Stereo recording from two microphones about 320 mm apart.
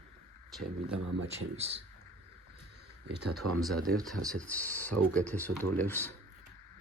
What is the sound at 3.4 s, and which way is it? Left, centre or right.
Speech, right.